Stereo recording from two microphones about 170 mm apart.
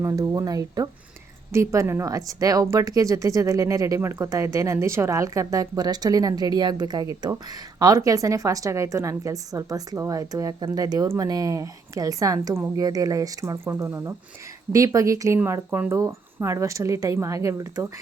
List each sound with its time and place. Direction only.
0.0 s speech: 20° right (ahead or behind)